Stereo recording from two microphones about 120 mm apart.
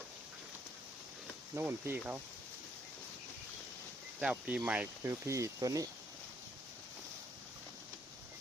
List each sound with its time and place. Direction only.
1.5 s speech: 15° right (ahead or behind)
4.2 s speech: 10° right (ahead or behind)
5.0 s speech: 25° right (ahead or behind)